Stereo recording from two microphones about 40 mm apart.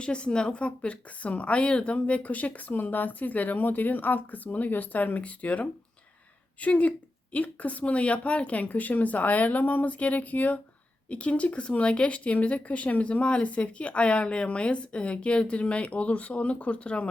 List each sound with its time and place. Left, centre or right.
0.0 s speech: left
2.7 s speech: left